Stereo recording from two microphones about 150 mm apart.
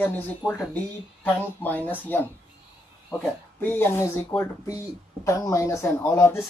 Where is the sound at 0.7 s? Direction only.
10° left (ahead or behind).